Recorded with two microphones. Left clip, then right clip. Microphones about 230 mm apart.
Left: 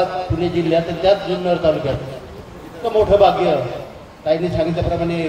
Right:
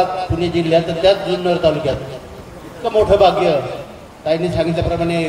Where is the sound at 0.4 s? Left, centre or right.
Right.